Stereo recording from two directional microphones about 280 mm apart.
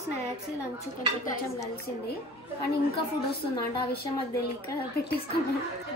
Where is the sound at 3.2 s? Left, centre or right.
Left.